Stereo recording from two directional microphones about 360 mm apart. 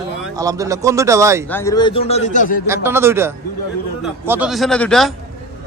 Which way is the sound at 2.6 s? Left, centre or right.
Centre.